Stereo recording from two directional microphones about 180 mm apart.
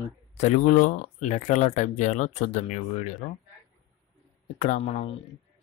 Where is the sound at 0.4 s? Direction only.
45° left (ahead or behind).